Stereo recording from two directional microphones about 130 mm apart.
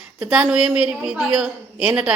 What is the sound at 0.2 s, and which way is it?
A woman's voice, 5° right (ahead or behind).